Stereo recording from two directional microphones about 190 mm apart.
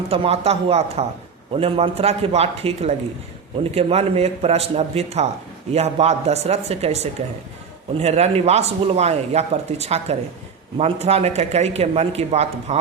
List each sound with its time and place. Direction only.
0.1 s speech: 30° right (ahead or behind)